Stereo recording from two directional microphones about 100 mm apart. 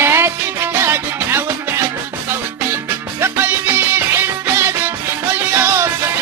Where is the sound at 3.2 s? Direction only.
20° right (ahead or behind).